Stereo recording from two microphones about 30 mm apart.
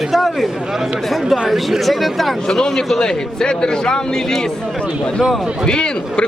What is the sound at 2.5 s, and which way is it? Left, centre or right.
A man's voice, centre.